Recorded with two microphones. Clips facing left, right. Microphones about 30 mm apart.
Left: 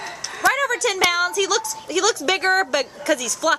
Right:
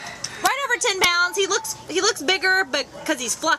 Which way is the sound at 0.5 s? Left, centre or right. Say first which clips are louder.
Left 2 dB; centre.